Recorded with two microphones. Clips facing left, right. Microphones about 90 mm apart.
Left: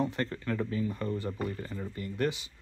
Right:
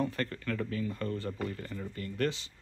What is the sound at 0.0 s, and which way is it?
Speech, 20° left (ahead or behind).